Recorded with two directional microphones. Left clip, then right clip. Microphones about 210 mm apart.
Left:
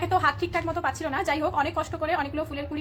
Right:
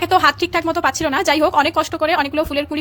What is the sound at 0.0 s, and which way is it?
A woman's voice, 45° right (ahead or behind).